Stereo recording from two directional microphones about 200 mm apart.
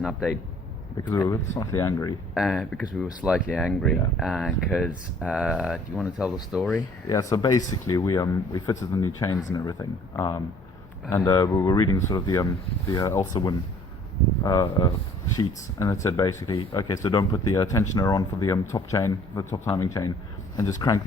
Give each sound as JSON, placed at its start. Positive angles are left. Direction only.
{"t": 0.0, "sound": "speech", "side_deg": 0}
{"t": 1.0, "sound": "speech", "side_deg": 15}
{"t": 2.3, "sound": "speech", "side_deg": -5}
{"t": 7.1, "sound": "speech", "side_deg": 15}